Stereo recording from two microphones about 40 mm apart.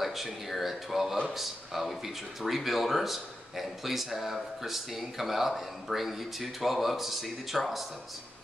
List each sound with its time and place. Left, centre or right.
0.0 s speech: centre